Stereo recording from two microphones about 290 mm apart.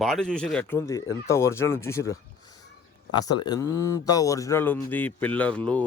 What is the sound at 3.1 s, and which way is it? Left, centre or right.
Speech, centre.